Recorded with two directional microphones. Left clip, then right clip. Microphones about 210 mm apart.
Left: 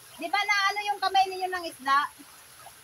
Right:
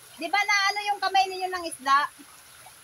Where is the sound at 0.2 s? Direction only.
15° right (ahead or behind).